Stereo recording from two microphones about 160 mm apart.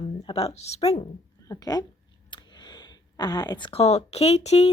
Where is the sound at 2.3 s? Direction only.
30° left (ahead or behind).